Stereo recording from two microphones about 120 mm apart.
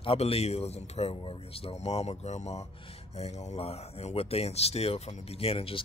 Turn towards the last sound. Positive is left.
turn(degrees=50)  # may be behind; listen again after turning